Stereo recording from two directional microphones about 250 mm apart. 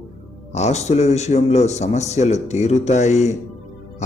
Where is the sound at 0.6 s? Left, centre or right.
Left.